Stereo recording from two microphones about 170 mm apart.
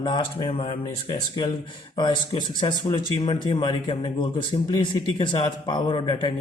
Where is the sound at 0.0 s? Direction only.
25° left (ahead or behind).